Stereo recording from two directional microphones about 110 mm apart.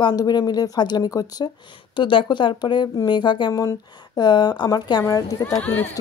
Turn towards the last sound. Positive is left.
turn(degrees=10)  # may be behind; listen again after turning